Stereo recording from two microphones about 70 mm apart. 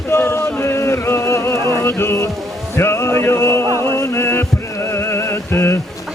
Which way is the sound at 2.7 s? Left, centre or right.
Left.